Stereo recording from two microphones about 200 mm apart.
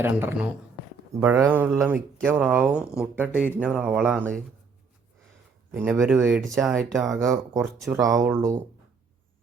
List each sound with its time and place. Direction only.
0.0 s speech: 10° right (ahead or behind)
5.7 s speech: 10° right (ahead or behind)
7.9 s speech: 15° right (ahead or behind)